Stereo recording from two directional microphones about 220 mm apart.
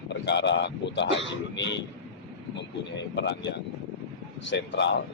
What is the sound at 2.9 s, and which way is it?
Speech, 50° left (ahead or behind).